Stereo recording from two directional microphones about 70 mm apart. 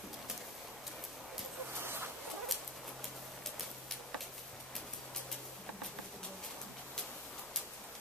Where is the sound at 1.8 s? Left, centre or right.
Right.